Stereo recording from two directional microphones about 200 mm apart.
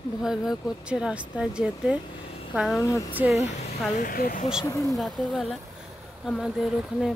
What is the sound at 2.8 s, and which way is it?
Speech, 15° left (ahead or behind).